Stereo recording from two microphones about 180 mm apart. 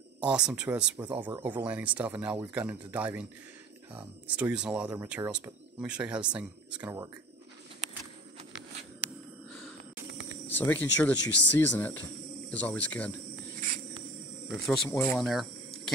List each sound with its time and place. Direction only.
0.2 s speech: 5° right (ahead or behind)
10.5 s speech: 10° left (ahead or behind)
14.5 s speech: centre (ahead or behind)
14.9 s speech: 15° left (ahead or behind)
15.1 s speech: centre (ahead or behind)